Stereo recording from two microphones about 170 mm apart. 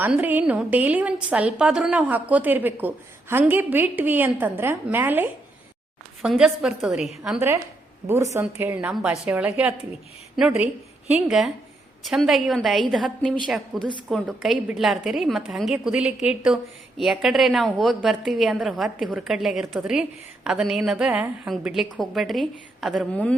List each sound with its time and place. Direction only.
0.0 s a woman's voice: 10° right (ahead or behind)
7.3 s a woman's voice: 15° right (ahead or behind)
11.3 s a woman's voice: centre (ahead or behind)